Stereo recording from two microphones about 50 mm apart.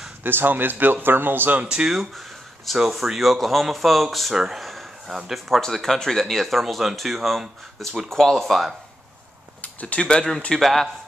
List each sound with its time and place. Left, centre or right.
0.2 s speech: right
1.6 s speech: right
1.9 s a sound: centre
2.8 s speech: centre
4.4 s a sound: centre
5.5 s speech: centre
9.6 s a sound: left
9.9 s speech: centre
10.5 s speech: centre